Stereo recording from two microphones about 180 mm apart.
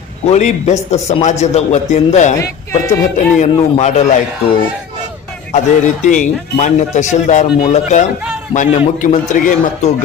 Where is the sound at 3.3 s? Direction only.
40° left (ahead or behind).